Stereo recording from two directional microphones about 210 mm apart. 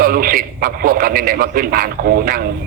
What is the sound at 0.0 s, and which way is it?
A man's voice, 45° right (ahead or behind).